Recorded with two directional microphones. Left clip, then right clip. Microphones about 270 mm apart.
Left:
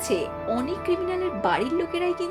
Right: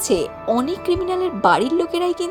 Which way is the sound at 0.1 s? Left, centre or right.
Centre.